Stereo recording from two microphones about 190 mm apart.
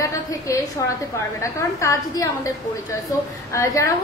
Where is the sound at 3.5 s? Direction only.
15° left (ahead or behind).